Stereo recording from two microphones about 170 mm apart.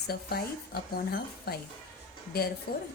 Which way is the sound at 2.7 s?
65° left (ahead or behind).